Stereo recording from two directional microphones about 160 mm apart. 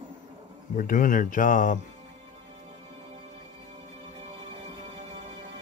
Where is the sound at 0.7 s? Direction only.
55° left (ahead or behind).